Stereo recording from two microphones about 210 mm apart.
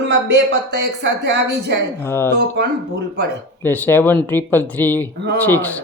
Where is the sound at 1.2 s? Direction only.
55° right (ahead or behind).